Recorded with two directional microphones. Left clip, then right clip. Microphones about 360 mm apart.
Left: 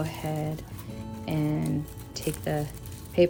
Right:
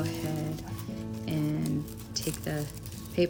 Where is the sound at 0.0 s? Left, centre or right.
Centre.